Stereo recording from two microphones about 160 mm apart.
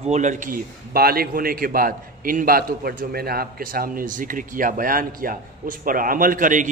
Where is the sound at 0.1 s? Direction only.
50° right (ahead or behind).